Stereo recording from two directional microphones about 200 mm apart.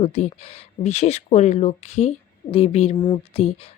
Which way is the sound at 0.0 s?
30° left (ahead or behind).